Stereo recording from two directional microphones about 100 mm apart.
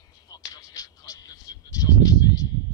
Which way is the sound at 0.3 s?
40° left (ahead or behind).